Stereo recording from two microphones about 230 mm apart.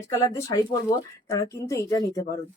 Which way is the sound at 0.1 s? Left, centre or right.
Centre.